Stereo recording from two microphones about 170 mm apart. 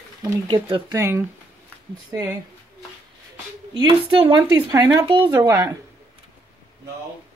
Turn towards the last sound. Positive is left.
turn(degrees=-20)  # may be behind; listen again after turning